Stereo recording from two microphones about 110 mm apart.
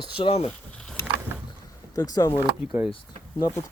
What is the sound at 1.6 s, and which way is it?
Boat, 35° left (ahead or behind).